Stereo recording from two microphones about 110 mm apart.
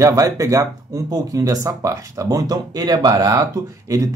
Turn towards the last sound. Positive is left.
turn(degrees=-30)  # may be behind; listen again after turning